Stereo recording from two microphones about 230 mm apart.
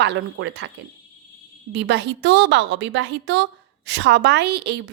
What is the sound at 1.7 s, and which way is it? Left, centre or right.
Speech, right.